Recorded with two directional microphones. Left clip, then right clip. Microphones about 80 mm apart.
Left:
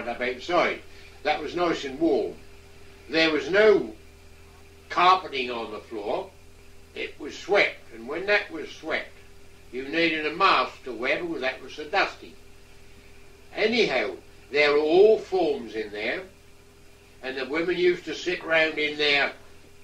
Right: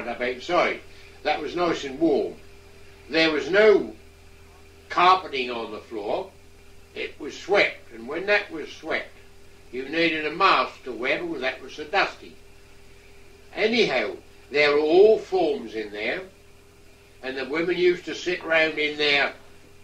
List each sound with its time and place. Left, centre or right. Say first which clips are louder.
0.0 s speech: right 1 dB; left
13.5 s speech: right 1 dB; left